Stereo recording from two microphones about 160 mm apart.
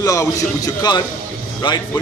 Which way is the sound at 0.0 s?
20° left (ahead or behind).